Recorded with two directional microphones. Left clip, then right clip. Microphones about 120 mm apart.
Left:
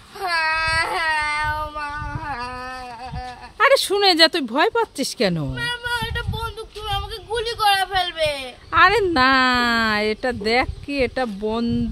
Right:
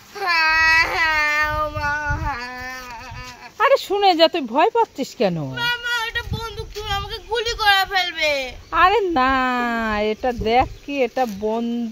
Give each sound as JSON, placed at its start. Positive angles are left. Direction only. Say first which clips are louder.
{"t": 0.2, "sound": "babbling", "louder": "right 4 dB", "side_deg": 30}
{"t": 3.5, "sound": "a sound", "louder": "left 1 dB", "side_deg": 10}
{"t": 8.7, "sound": "a woman's voice", "louder": "left 1 dB", "side_deg": 10}